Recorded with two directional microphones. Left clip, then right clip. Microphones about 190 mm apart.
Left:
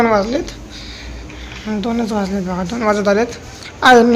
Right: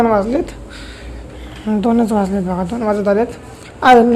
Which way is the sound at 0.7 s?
50° right (ahead or behind).